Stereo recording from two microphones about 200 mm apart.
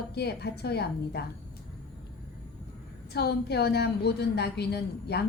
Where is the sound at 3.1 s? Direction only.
55° left (ahead or behind).